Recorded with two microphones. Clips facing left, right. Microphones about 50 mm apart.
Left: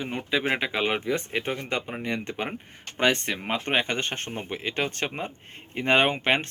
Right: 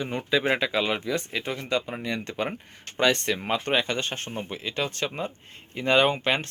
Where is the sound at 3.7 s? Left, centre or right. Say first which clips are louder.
Left 1 dB; left.